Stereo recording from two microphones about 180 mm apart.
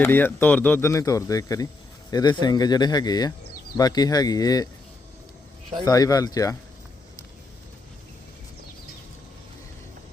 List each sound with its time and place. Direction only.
0.0 s speech: 10° left (ahead or behind)
5.8 s speech: 20° left (ahead or behind)